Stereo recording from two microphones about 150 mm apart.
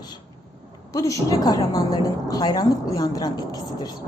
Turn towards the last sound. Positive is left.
turn(degrees=25)  # may be behind; listen again after turning